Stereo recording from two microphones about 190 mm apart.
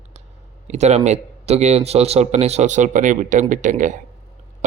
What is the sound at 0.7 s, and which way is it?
A man's voice, 35° right (ahead or behind).